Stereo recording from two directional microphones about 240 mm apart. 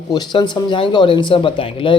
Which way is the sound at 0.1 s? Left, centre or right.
Centre.